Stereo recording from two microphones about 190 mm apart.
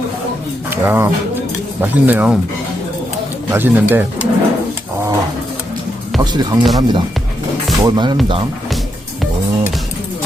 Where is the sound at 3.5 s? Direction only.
10° right (ahead or behind).